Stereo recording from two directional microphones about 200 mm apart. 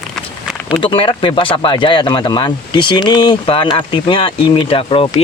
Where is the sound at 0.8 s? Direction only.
25° left (ahead or behind).